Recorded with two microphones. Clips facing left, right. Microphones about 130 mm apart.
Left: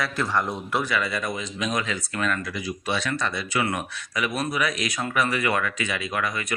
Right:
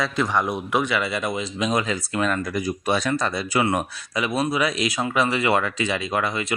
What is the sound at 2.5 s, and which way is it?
A man's voice, 45° right (ahead or behind).